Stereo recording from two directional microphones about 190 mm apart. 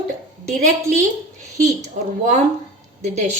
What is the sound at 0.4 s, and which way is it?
Speech, 40° right (ahead or behind).